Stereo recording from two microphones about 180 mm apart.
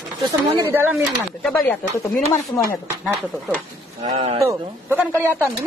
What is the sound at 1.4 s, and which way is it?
Speech, centre (ahead or behind).